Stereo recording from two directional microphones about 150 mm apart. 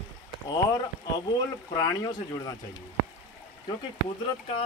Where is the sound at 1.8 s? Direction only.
25° left (ahead or behind).